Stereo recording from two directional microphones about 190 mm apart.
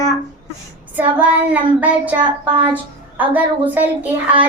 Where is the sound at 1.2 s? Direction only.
5° right (ahead or behind).